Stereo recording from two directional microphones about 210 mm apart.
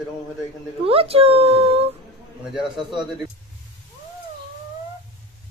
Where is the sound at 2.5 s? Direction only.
Centre (ahead or behind).